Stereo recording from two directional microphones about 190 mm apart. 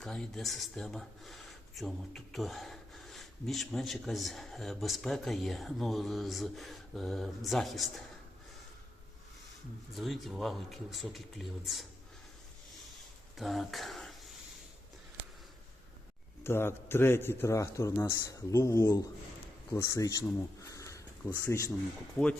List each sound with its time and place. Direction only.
0.0 s speech: 5° left (ahead or behind)
9.9 s speech: centre (ahead or behind)
13.3 s speech: centre (ahead or behind)
16.4 s speech: 10° left (ahead or behind)